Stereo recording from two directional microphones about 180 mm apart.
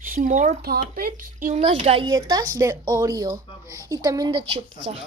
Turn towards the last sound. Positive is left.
turn(degrees=-30)  # may be behind; listen again after turning